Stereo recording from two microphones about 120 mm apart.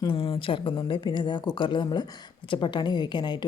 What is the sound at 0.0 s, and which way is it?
A woman's voice, 45° left (ahead or behind).